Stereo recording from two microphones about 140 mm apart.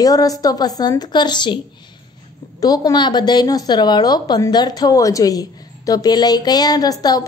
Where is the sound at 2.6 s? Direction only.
25° left (ahead or behind).